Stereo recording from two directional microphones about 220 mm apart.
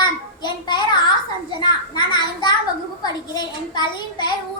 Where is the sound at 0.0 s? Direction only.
20° left (ahead or behind).